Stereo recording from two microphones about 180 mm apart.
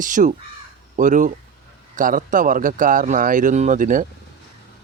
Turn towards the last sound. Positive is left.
turn(degrees=-50)  # may be behind; listen again after turning